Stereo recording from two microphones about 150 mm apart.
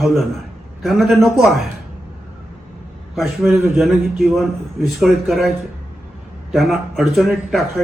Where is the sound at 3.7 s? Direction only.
Centre (ahead or behind).